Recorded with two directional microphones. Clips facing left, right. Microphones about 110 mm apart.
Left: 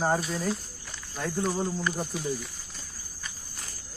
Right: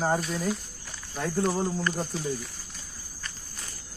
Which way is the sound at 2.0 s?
15° left (ahead or behind).